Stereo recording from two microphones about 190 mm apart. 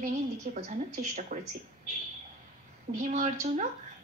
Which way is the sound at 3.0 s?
40° right (ahead or behind).